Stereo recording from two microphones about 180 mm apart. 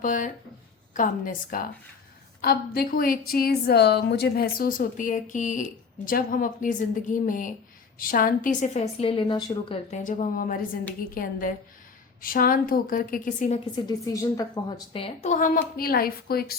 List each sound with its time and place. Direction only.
0.0 s a woman's voice: 45° left (ahead or behind); by 10.0 s 30° left (ahead or behind)
10.0 s a woman's voice: 45° left (ahead or behind)
13.8 s a woman's voice: 20° left (ahead or behind)
15.3 s a woman's voice: 50° left (ahead or behind)